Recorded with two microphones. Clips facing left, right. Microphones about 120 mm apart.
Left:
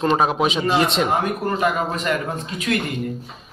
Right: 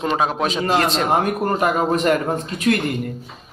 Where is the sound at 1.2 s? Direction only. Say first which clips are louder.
Right 2 dB; 45° right (ahead or behind).